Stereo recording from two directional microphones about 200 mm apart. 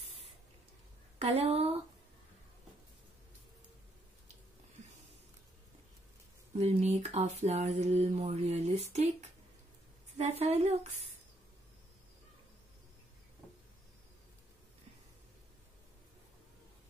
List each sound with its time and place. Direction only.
1.2 s speech: 30° right (ahead or behind)
6.6 s speech: 35° right (ahead or behind)